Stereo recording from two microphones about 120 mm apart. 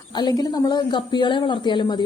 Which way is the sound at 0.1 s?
35° left (ahead or behind).